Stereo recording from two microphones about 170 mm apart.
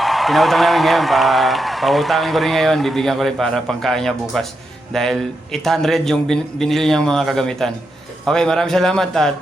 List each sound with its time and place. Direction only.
0.0 s a man's voice: centre (ahead or behind)